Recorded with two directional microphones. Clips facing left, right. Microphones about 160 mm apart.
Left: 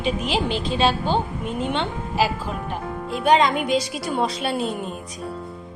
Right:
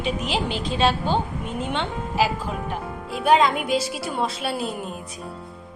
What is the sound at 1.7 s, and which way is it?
Speech, 10° left (ahead or behind).